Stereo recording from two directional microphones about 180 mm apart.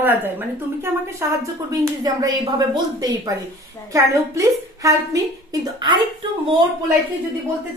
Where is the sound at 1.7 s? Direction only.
20° right (ahead or behind).